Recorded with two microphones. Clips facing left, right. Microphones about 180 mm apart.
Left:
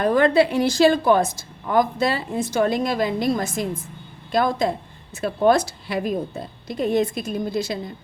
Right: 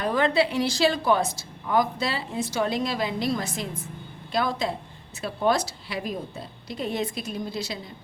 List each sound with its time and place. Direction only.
0.0 s a woman's voice: 50° left (ahead or behind)